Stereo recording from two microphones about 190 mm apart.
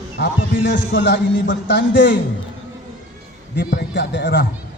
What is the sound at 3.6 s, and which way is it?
Speech, 65° left (ahead or behind).